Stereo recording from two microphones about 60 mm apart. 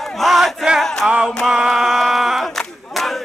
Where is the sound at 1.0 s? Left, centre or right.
Centre.